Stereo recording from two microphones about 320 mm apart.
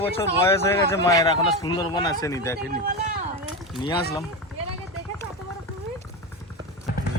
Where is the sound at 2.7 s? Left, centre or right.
Right.